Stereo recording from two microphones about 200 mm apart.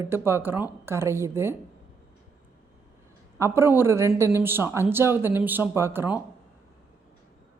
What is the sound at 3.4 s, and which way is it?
Speech, 10° right (ahead or behind).